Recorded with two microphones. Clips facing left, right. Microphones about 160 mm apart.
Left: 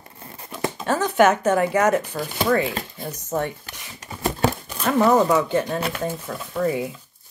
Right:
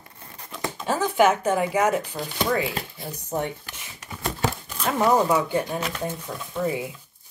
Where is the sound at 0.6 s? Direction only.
20° left (ahead or behind).